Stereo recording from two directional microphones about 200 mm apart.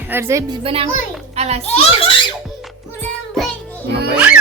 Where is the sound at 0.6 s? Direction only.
25° right (ahead or behind).